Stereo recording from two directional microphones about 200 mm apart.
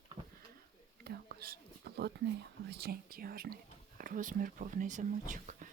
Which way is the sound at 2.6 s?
50° right (ahead or behind).